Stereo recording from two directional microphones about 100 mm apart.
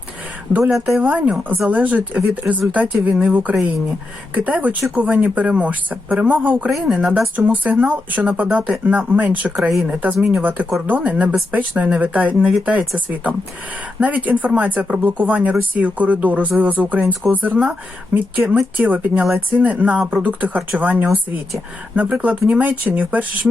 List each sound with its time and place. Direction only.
0.6 s a woman's voice: centre (ahead or behind)
1.0 s speech: 15° right (ahead or behind)
6.7 s speech: centre (ahead or behind)
14.0 s speech: 15° right (ahead or behind)